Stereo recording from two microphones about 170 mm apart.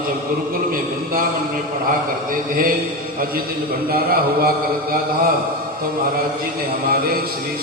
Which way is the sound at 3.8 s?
60° right (ahead or behind).